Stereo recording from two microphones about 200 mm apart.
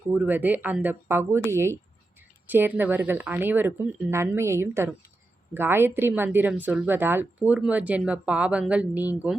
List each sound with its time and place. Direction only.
0.1 s a woman's voice: 10° right (ahead or behind)